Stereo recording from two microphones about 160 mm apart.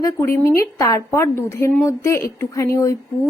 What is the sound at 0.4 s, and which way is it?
A woman's voice, 20° left (ahead or behind).